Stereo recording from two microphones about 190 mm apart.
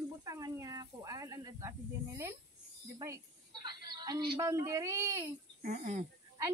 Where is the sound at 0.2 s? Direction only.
20° right (ahead or behind).